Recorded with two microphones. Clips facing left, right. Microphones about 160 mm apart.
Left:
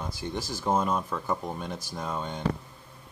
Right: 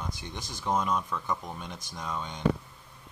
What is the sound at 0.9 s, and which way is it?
Speech, 35° left (ahead or behind).